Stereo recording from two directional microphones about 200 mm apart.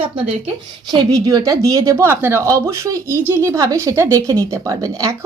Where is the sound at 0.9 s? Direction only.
20° right (ahead or behind).